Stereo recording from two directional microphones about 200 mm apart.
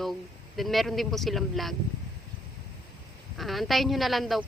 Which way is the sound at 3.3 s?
Centre (ahead or behind).